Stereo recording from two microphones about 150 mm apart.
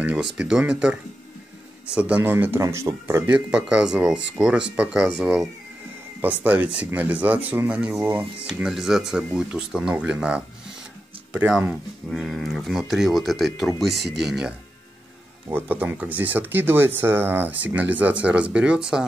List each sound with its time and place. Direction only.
0.0 s speech: 10° right (ahead or behind)
2.0 s speech: 10° right (ahead or behind)
3.3 s speech: 5° right (ahead or behind)
15.5 s speech: 10° right (ahead or behind)